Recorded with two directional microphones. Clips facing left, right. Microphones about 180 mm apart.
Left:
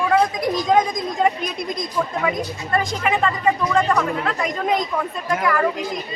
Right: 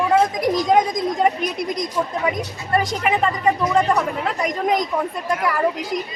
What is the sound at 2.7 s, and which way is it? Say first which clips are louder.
Speech: right 1 dB; 20° right (ahead or behind).